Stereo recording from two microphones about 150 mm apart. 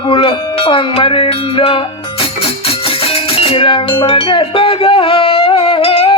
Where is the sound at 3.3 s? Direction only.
40° left (ahead or behind).